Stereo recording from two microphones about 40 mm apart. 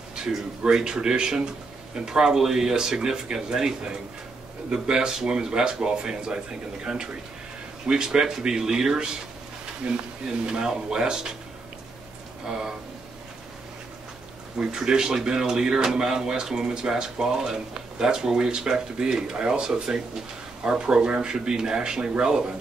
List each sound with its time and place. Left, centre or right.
0.7 s speech: centre
10.2 s speech: right
12.4 s speech: centre
14.8 s speech: centre